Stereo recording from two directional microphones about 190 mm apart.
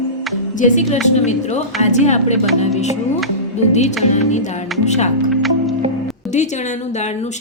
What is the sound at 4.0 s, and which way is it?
Speech, 40° left (ahead or behind).